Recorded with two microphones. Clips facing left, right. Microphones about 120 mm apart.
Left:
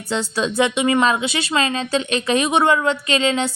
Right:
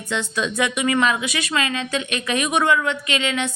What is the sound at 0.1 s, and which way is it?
Speech, 30° left (ahead or behind).